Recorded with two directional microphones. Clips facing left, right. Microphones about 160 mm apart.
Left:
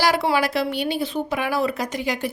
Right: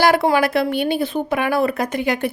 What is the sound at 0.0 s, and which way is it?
A woman's voice, 55° right (ahead or behind).